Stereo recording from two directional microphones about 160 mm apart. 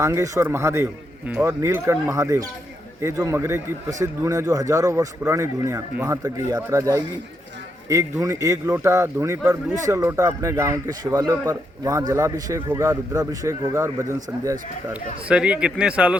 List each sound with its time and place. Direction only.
0.0 s speech: 20° right (ahead or behind)
15.3 s speech: 5° right (ahead or behind)